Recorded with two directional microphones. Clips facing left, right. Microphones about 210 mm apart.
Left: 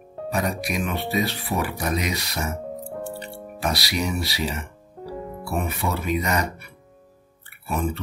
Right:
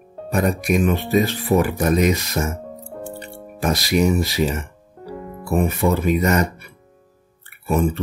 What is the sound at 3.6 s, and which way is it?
Speech, 45° right (ahead or behind).